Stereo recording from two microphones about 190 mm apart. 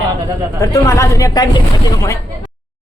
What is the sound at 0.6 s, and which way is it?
Speech, 15° left (ahead or behind).